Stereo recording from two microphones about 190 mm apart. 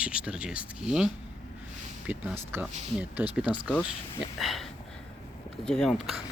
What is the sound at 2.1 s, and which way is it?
Speech, 10° right (ahead or behind).